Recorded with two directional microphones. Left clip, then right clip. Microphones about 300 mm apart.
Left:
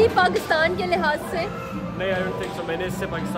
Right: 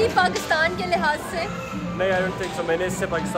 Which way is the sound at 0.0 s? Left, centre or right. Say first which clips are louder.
Left 2 dB; centre.